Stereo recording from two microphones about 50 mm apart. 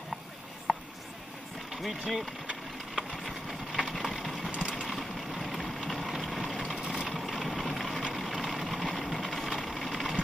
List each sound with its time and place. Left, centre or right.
0.7 s writing: centre
1.8 s speech: centre
3.0 s a sound: centre
4.5 s vehicle: right
4.8 s vehicle: centre